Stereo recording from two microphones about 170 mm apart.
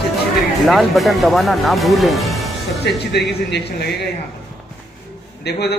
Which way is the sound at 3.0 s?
75° left (ahead or behind).